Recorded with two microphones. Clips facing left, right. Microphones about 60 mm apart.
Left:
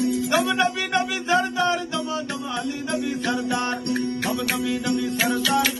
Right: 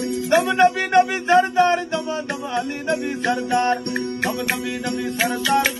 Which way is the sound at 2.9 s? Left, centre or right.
Right.